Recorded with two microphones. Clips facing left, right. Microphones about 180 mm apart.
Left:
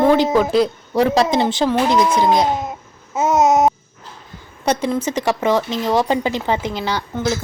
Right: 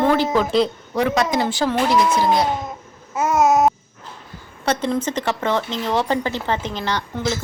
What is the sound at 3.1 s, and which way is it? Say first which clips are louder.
Babbling: left 2 dB; 20° left (ahead or behind).